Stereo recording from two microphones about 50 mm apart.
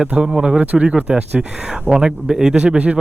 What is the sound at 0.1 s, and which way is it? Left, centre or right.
Speech, right.